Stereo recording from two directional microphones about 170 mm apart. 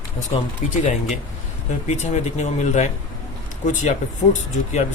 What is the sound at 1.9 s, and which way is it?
Speech, 40° left (ahead or behind).